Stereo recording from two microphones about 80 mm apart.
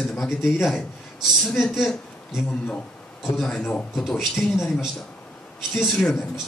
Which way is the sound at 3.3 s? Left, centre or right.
Centre.